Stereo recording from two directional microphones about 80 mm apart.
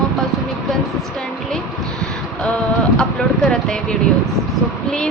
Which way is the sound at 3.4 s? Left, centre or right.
Centre.